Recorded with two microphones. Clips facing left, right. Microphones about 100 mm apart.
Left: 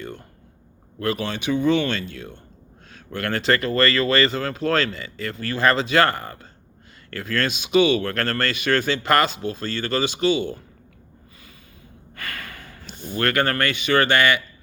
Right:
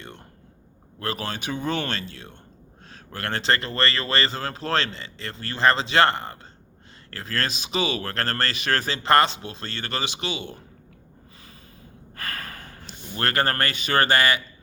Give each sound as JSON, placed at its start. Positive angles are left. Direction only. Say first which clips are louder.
{"t": 1.0, "sound": "speech", "louder": "left 5 dB", "side_deg": -35}
{"t": 12.1, "sound": "snort", "louder": "even", "side_deg": -35}
{"t": 13.1, "sound": "speech", "louder": "left 3 dB", "side_deg": -35}